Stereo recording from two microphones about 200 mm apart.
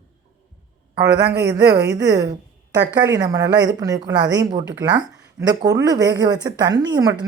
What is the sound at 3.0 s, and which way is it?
A woman's voice, 15° right (ahead or behind).